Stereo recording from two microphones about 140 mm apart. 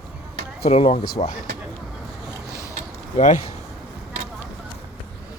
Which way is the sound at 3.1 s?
55° left (ahead or behind).